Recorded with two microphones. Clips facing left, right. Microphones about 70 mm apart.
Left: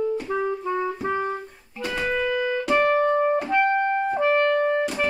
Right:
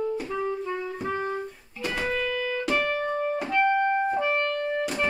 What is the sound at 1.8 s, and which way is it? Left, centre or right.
Music, centre.